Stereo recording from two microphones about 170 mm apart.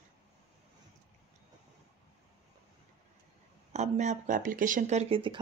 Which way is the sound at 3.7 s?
45° right (ahead or behind).